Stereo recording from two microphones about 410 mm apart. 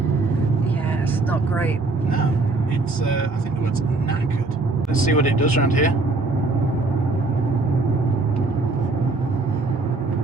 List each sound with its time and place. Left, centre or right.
1.3 s speech: centre
5.0 s speech: centre